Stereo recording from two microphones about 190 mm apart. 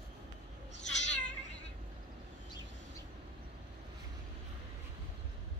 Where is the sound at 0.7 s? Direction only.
70° left (ahead or behind).